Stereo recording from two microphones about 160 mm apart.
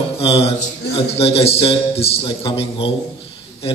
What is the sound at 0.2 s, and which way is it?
A man's voice, 35° left (ahead or behind).